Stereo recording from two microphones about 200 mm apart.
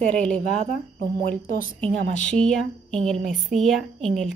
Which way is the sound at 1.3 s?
45° left (ahead or behind).